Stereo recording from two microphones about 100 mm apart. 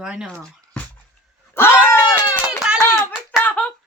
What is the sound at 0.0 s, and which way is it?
Speech, 5° right (ahead or behind).